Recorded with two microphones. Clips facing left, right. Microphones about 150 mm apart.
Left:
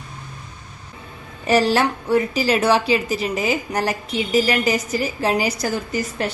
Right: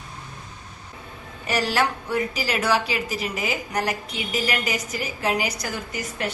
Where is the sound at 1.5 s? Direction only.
30° left (ahead or behind).